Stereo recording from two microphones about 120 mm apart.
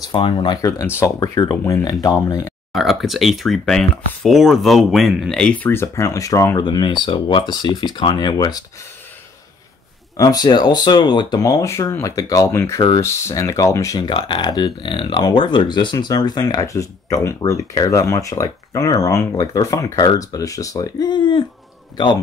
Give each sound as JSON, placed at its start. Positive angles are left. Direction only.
{"t": 0.0, "sound": "speech", "side_deg": 40}
{"t": 0.7, "sound": "speech", "side_deg": 20}
{"t": 2.7, "sound": "speech", "side_deg": 0}
{"t": 6.6, "sound": "speech", "side_deg": 40}
{"t": 10.1, "sound": "speech", "side_deg": 30}
{"t": 14.0, "sound": "speech", "side_deg": 40}